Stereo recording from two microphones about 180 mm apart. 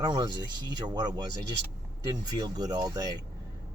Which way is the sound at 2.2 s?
20° right (ahead or behind).